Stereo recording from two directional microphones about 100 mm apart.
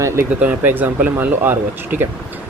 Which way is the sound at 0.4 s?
20° right (ahead or behind).